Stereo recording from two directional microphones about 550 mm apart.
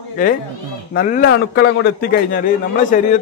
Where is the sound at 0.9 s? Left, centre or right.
Centre.